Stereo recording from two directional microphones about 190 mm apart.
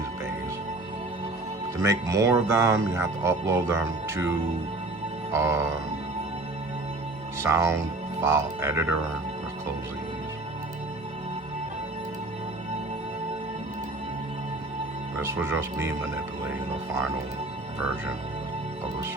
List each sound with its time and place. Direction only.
1.8 s speech: 15° right (ahead or behind)
5.3 s speech: 15° right (ahead or behind)
7.4 s speech: 15° right (ahead or behind)
15.2 s speech: 15° right (ahead or behind)